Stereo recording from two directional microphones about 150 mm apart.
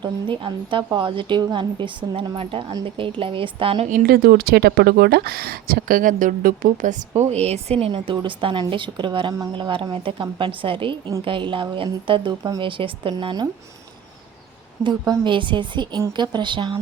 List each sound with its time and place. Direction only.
0.0 s a woman's voice: 35° right (ahead or behind)
3.8 s speech: 80° right
7.1 s a woman's voice: 45° right (ahead or behind)
12.4 s speech: 25° right (ahead or behind)
12.6 s a woman's voice: 35° right (ahead or behind)
14.8 s a woman's voice: 30° right (ahead or behind)